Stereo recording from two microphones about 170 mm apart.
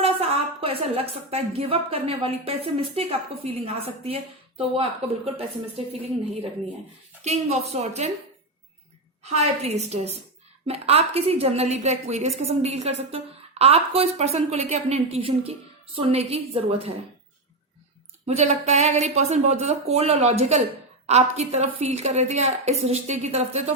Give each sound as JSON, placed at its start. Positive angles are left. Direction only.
{"t": 0.0, "sound": "speech", "side_deg": -35}
{"t": 7.2, "sound": "speech", "side_deg": -40}
{"t": 9.2, "sound": "speech", "side_deg": -40}
{"t": 18.3, "sound": "speech", "side_deg": -40}